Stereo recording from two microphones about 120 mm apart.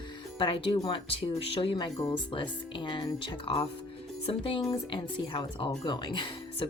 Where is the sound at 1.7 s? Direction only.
35° left (ahead or behind).